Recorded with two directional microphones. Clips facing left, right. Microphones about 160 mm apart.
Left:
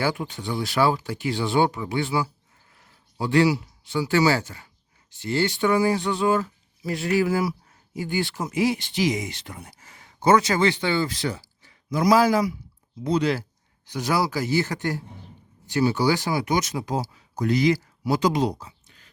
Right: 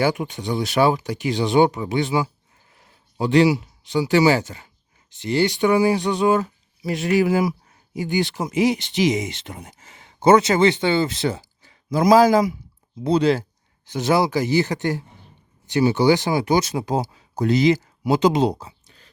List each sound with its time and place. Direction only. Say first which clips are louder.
0.0 s speech: right 5 dB; 15° right (ahead or behind); by 19.1 s 35° right (ahead or behind)